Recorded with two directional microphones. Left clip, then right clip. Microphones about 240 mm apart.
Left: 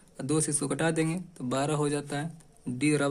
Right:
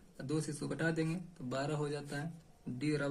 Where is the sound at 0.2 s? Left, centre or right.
Left.